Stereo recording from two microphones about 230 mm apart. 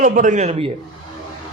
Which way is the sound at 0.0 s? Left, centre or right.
Right.